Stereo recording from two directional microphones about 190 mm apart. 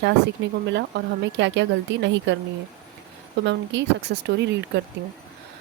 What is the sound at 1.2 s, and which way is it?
A woman's voice, 65° right (ahead or behind).